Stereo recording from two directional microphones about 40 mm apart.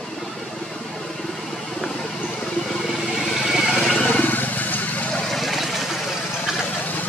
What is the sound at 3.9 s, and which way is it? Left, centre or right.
Wild animals, left.